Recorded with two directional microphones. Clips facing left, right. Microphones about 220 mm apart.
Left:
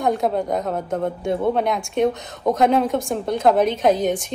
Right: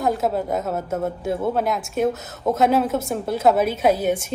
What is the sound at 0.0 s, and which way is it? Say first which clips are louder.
A woman's voice: left 1 dB; 5° right (ahead or behind).